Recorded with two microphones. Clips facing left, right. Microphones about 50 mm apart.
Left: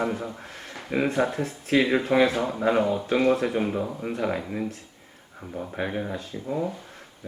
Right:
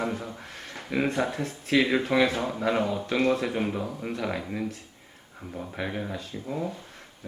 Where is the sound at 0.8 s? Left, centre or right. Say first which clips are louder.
Left 2 dB; centre.